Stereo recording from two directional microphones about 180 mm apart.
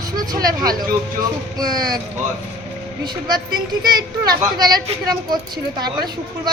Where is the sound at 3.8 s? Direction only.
20° right (ahead or behind).